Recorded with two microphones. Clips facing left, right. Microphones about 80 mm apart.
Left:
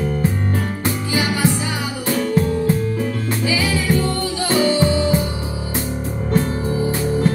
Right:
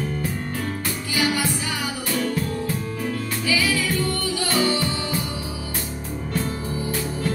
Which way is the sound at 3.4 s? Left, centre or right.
Left.